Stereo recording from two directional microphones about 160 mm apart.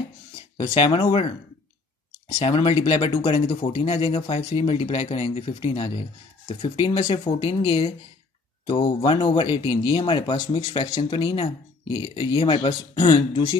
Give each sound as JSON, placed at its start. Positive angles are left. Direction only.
{"t": 0.7, "sound": "speech", "side_deg": 25}
{"t": 2.3, "sound": "speech", "side_deg": 35}